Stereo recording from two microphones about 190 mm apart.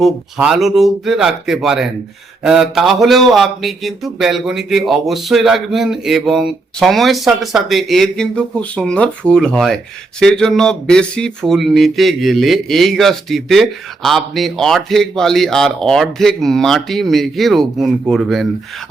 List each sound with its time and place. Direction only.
0.0 s speech: centre (ahead or behind)